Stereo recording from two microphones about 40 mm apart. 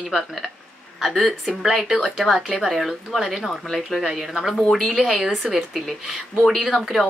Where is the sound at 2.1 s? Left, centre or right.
Centre.